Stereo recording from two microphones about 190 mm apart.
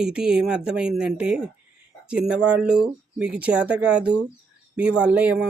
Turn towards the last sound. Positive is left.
turn(degrees=-10)  # may be behind; listen again after turning